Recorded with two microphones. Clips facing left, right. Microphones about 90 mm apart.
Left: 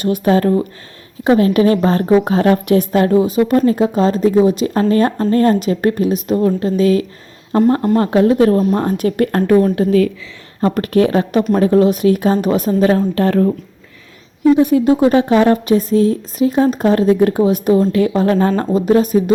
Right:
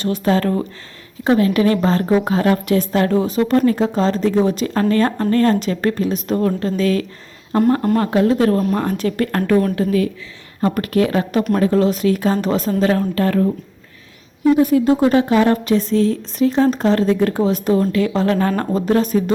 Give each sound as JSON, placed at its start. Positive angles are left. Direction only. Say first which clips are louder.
{"t": 0.0, "sound": "a woman's voice", "louder": "left 4 dB", "side_deg": 15}
{"t": 4.6, "sound": "speech", "louder": "left 3 dB", "side_deg": 20}
{"t": 7.9, "sound": "a woman's voice", "louder": "left 4 dB", "side_deg": 25}
{"t": 14.6, "sound": "a woman's voice", "louder": "left 2 dB", "side_deg": 20}